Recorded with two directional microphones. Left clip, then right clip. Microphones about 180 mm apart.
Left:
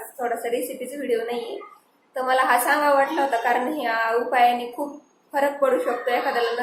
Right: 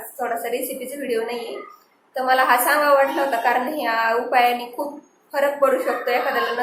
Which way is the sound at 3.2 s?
5° left (ahead or behind).